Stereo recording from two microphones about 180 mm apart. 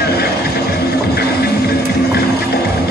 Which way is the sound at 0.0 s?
60° left (ahead or behind).